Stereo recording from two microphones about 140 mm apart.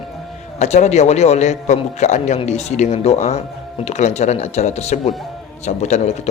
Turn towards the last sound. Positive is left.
turn(degrees=55)  # may be behind; listen again after turning